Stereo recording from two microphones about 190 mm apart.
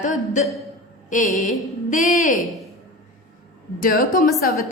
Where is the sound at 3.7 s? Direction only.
45° left (ahead or behind).